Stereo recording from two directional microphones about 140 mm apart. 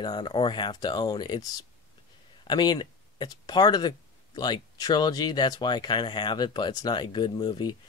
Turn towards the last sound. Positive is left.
turn(degrees=30)  # may be behind; listen again after turning